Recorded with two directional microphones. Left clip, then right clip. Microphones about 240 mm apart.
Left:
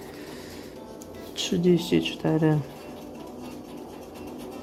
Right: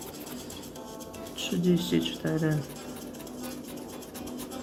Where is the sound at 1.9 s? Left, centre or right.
Centre.